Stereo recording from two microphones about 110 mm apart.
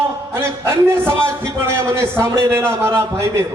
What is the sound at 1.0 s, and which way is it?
A man's voice, 25° right (ahead or behind).